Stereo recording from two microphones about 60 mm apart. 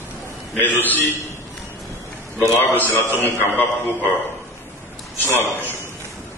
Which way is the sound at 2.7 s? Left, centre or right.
Left.